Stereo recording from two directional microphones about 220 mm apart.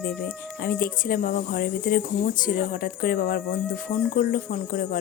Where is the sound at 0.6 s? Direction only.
40° left (ahead or behind).